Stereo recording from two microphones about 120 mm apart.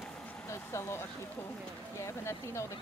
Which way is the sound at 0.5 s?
25° left (ahead or behind).